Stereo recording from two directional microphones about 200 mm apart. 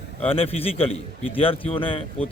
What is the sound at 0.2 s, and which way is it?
A man's voice, 30° left (ahead or behind).